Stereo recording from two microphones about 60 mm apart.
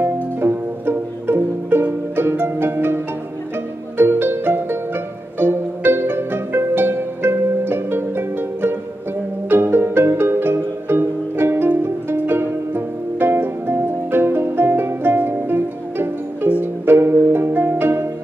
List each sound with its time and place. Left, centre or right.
0.0 s music: right
4.0 s music: right
16.8 s pizzicato: right